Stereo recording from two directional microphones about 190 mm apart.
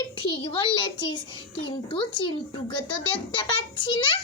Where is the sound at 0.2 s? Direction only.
25° left (ahead or behind).